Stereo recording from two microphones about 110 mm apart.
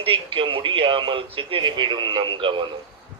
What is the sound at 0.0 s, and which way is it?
A man's voice, 55° right (ahead or behind).